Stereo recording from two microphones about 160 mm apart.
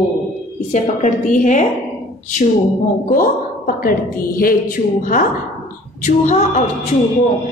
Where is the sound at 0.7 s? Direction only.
45° left (ahead or behind).